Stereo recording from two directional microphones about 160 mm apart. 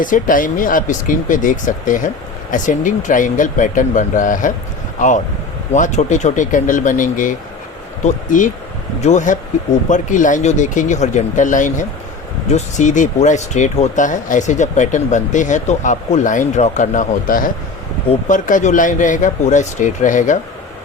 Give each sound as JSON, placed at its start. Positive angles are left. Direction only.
{"t": 0.0, "sound": "speech", "side_deg": 55}